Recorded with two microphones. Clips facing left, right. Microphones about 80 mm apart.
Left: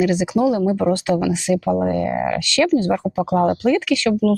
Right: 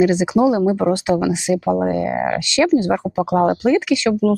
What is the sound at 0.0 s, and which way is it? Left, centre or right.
Speech, right.